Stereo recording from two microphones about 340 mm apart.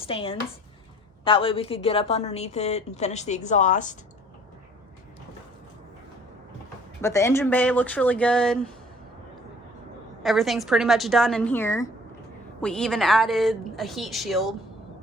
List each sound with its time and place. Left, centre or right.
0.0 s a woman's voice: centre
7.0 s a woman's voice: centre
10.2 s a woman's voice: centre